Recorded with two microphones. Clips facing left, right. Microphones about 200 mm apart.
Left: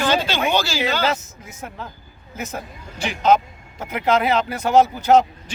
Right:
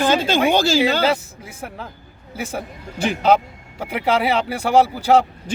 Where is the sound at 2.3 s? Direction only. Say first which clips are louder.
Right 3 dB; 10° right (ahead or behind).